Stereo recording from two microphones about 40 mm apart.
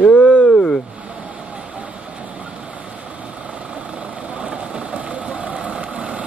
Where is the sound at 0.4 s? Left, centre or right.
Left.